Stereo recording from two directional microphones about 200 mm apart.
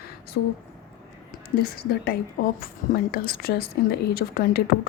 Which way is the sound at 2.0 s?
45° left (ahead or behind).